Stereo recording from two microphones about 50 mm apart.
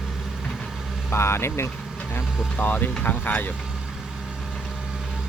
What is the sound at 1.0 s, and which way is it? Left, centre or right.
Speech, left.